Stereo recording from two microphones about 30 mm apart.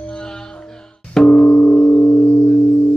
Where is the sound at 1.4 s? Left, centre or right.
Left.